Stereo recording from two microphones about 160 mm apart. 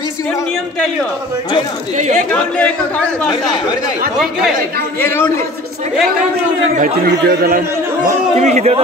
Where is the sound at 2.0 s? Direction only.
50° right (ahead or behind).